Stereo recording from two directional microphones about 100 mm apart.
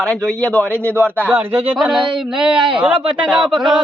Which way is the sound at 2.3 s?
5° right (ahead or behind).